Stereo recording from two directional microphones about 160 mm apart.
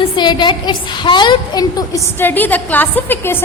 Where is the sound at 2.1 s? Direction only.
10° left (ahead or behind).